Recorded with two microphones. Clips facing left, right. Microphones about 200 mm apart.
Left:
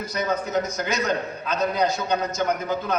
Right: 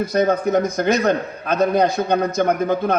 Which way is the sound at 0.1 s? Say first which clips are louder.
Right 6 dB; 55° right (ahead or behind).